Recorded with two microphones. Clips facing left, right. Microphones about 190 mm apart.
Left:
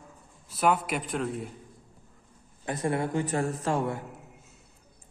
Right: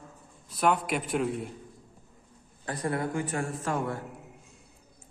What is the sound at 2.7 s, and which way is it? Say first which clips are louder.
Speech: left 2 dB; 25° left (ahead or behind).